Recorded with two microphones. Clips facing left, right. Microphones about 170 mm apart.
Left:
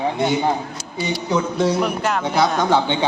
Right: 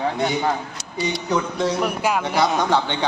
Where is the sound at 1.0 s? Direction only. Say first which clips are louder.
Left 1 dB; 5° left (ahead or behind).